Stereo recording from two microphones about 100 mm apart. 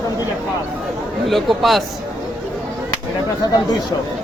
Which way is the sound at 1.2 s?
Centre (ahead or behind).